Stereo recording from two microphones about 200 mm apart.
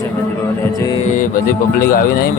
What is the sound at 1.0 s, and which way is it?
Speech, 40° left (ahead or behind).